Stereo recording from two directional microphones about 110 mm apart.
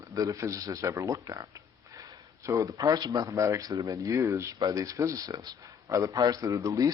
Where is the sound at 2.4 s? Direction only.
30° right (ahead or behind).